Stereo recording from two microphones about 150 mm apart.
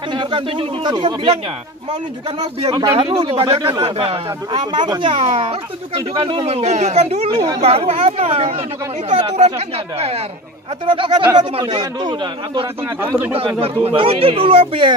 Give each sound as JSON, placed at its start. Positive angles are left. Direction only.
{"t": 0.1, "sound": "speech", "side_deg": -30}
{"t": 2.7, "sound": "speech", "side_deg": -25}
{"t": 3.0, "sound": "speech", "side_deg": -35}
{"t": 11.3, "sound": "speech", "side_deg": -35}